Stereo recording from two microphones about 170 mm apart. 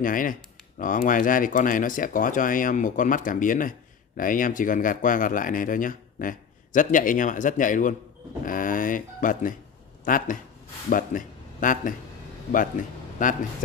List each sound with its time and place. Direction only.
0.0 s speech: 55° left (ahead or behind)
13.2 s speech: 50° left (ahead or behind)